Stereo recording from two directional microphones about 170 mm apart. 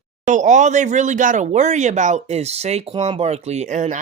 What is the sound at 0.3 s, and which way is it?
Speech, 45° right (ahead or behind).